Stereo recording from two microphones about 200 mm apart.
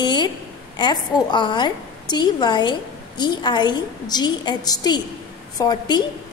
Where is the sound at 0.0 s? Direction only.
20° left (ahead or behind).